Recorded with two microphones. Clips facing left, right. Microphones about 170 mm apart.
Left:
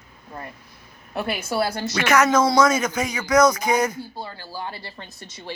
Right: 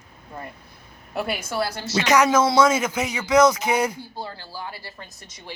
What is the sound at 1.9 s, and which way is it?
Speech, 20° right (ahead or behind).